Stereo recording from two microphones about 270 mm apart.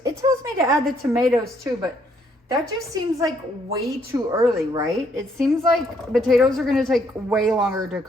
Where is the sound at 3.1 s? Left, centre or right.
Centre.